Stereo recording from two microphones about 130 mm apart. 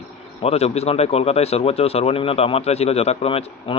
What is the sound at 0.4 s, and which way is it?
Speech, 55° left (ahead or behind).